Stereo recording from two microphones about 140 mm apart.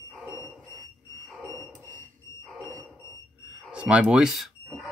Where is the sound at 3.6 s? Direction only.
10° right (ahead or behind).